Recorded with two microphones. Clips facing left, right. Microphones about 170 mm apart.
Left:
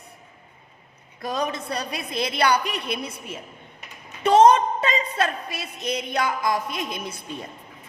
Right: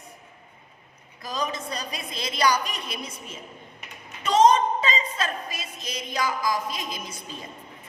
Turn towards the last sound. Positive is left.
turn(degrees=60)  # may be behind; listen again after turning